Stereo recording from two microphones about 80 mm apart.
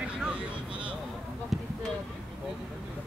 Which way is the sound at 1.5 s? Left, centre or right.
Centre.